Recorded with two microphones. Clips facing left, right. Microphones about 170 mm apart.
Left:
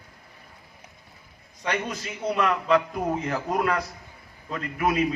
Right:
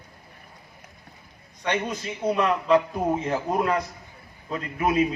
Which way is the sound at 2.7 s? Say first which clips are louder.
Right 4 dB; 25° right (ahead or behind).